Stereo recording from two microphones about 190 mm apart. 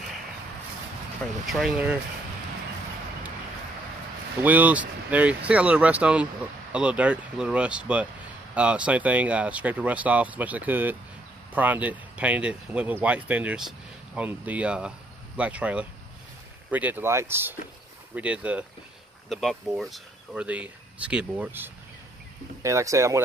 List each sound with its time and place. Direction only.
1.4 s speech: centre (ahead or behind)
4.4 s speech: 10° right (ahead or behind)